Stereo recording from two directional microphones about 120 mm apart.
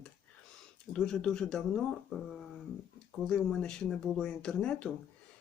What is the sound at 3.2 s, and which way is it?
Speech, 5° left (ahead or behind).